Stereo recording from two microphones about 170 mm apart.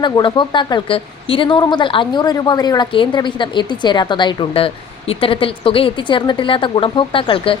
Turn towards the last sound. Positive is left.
turn(degrees=30)  # may be behind; listen again after turning